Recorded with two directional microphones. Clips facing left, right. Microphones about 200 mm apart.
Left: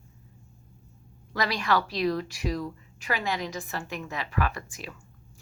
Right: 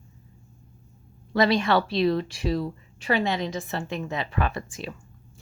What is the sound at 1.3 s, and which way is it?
A woman's voice, 25° right (ahead or behind).